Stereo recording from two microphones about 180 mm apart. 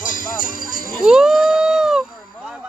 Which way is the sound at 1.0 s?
5° right (ahead or behind).